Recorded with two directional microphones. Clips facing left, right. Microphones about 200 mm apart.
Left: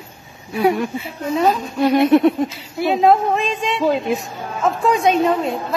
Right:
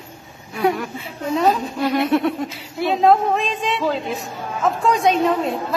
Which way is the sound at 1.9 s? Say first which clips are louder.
Left 6 dB; 20° left (ahead or behind).